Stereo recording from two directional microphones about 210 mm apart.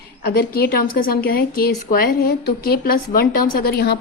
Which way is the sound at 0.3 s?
45° left (ahead or behind).